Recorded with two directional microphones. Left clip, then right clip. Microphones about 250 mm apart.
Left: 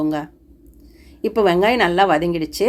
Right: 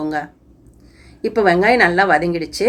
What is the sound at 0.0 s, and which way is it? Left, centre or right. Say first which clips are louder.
Speech: even; left.